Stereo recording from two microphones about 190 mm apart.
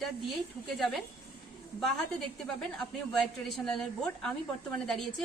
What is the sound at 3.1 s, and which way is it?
A woman's voice, centre (ahead or behind).